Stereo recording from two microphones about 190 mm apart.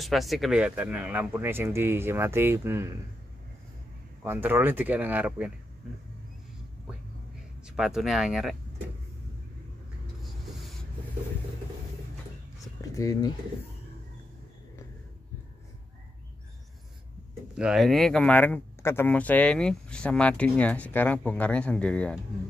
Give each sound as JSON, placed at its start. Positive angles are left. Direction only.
{"t": 0.0, "sound": "speech", "side_deg": 0}
{"t": 4.2, "sound": "speech", "side_deg": -10}
{"t": 7.6, "sound": "speech", "side_deg": 0}
{"t": 12.9, "sound": "speech", "side_deg": 20}
{"t": 17.6, "sound": "speech", "side_deg": 0}